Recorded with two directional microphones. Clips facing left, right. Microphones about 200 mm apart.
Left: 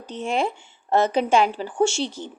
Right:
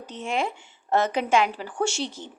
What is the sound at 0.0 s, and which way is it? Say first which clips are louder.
Speech: left 3 dB; 30° left (ahead or behind).